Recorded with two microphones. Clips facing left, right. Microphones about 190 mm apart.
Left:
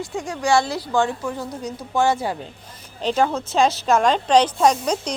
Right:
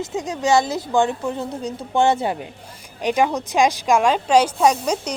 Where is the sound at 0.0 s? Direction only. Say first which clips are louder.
Right 2 dB; 20° right (ahead or behind).